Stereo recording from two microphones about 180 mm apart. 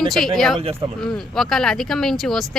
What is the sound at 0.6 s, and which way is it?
Speech, 30° right (ahead or behind).